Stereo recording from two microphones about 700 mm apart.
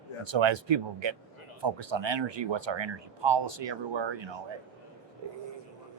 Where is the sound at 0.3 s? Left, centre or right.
Right.